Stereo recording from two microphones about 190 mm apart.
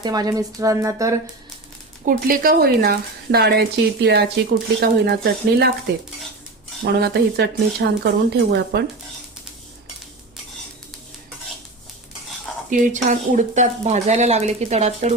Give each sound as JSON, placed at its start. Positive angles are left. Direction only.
{"t": 0.0, "sound": "speech", "side_deg": -20}
{"t": 2.0, "sound": "a woman's voice", "side_deg": -50}
{"t": 7.0, "sound": "a woman's voice", "side_deg": -60}
{"t": 12.7, "sound": "speech", "side_deg": -40}